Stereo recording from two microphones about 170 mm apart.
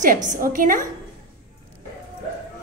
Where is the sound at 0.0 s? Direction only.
50° right (ahead or behind).